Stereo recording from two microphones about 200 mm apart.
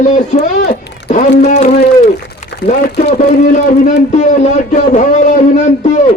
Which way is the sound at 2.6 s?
50° left (ahead or behind).